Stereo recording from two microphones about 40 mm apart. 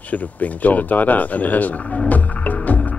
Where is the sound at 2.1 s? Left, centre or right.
Left.